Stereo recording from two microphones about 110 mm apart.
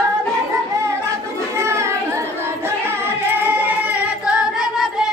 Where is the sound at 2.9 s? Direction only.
20° right (ahead or behind).